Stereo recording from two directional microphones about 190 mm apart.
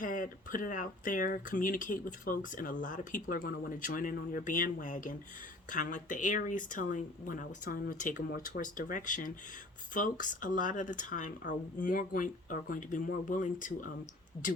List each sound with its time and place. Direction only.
0.0 s speech: 45° left (ahead or behind)